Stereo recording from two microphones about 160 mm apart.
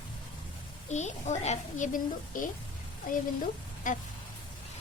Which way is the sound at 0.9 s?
45° left (ahead or behind).